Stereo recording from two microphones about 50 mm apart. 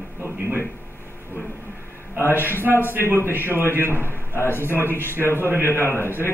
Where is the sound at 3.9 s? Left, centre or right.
Left.